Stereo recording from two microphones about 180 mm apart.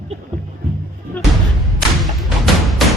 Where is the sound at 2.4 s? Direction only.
Centre (ahead or behind).